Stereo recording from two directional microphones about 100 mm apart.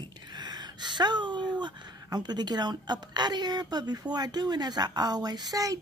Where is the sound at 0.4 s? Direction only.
45° right (ahead or behind).